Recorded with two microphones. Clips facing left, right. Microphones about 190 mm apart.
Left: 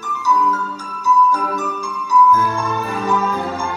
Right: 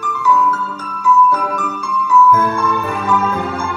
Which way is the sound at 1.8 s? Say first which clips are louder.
Right 3 dB; 55° right (ahead or behind).